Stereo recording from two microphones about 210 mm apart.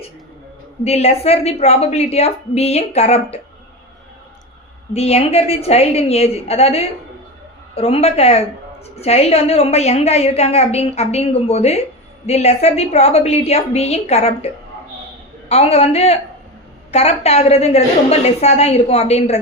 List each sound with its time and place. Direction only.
0.9 s a woman's voice: 30° left (ahead or behind)
4.9 s a woman's voice: 30° left (ahead or behind)